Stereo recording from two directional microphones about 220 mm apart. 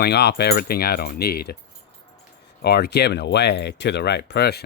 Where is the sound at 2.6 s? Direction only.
45° left (ahead or behind).